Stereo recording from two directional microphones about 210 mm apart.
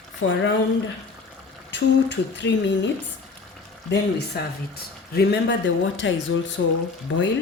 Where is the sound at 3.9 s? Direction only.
50° left (ahead or behind).